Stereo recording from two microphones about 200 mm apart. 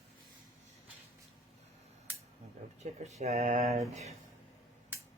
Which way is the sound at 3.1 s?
35° right (ahead or behind).